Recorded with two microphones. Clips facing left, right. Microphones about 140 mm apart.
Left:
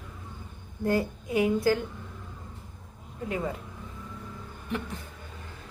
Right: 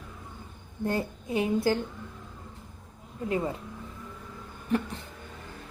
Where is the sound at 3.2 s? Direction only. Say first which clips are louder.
Right 2 dB; 30° right (ahead or behind).